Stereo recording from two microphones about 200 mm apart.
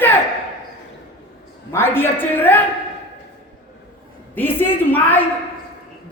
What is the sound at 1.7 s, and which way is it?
Speech, 10° left (ahead or behind).